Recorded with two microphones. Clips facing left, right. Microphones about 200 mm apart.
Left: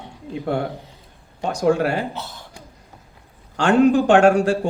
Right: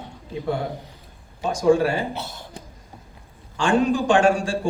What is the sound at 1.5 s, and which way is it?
Speech, 65° left (ahead or behind).